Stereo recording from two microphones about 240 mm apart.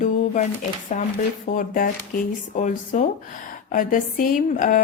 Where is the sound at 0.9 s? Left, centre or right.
Left.